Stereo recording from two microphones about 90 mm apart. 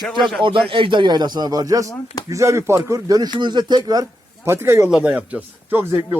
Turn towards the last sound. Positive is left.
turn(degrees=-25)  # may be behind; listen again after turning